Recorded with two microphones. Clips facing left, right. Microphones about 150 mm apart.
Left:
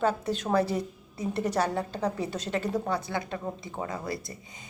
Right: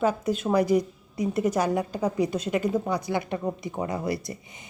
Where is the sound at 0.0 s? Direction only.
10° right (ahead or behind).